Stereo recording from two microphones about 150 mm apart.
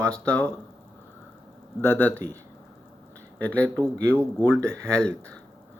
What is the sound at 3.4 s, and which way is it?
Speech, 10° left (ahead or behind).